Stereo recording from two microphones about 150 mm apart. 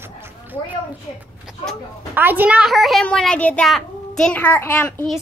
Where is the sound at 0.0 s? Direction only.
15° right (ahead or behind).